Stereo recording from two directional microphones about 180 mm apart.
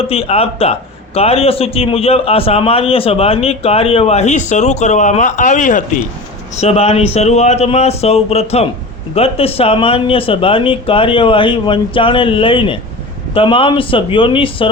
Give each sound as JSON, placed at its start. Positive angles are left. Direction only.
{"t": 0.0, "sound": "a man's voice", "side_deg": 35}